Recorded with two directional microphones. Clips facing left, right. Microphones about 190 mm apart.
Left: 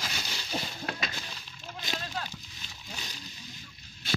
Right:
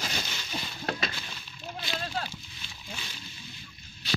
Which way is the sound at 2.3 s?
40° left (ahead or behind).